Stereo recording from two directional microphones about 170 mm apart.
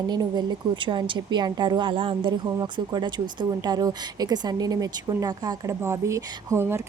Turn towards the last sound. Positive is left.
turn(degrees=-15)  # may be behind; listen again after turning